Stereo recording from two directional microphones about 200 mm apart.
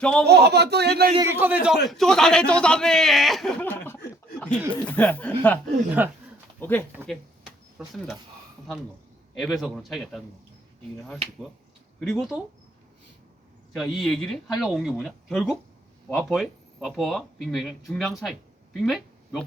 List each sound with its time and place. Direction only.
0.0 s a man's voice: 5° left (ahead or behind)
0.3 s speech: 55° right (ahead or behind)
1.1 s a man's voice: 15° right (ahead or behind); by 5.5 s 5° left (ahead or behind)
6.0 s speech: 10° right (ahead or behind)
6.6 s speech: 10° left (ahead or behind)
7.0 s a sound: centre (ahead or behind)
9.3 s a man's voice: centre (ahead or behind)
11.9 s a man's voice: 5° right (ahead or behind)
13.7 s a man's voice: centre (ahead or behind)